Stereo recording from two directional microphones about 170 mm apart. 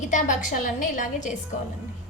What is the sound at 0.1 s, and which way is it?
A woman's voice, 50° left (ahead or behind).